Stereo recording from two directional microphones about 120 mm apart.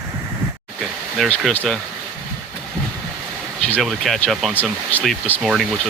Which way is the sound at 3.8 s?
Centre (ahead or behind).